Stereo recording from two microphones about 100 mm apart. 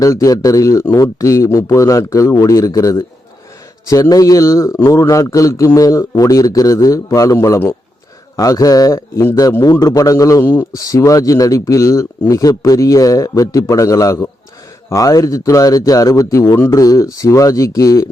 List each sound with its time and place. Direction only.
0.0 s a man's voice: 35° left (ahead or behind)
10.4 s speech: 20° left (ahead or behind)
10.8 s a man's voice: 35° left (ahead or behind)